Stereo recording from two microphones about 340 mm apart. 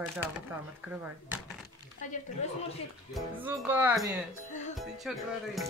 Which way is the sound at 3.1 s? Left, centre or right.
Centre.